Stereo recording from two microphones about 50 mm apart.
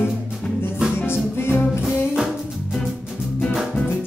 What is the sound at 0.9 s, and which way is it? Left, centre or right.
Music, left.